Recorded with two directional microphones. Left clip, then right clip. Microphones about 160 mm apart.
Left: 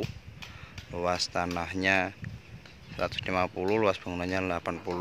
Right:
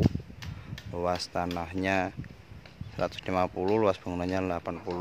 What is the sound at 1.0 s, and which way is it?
Speech, 15° right (ahead or behind).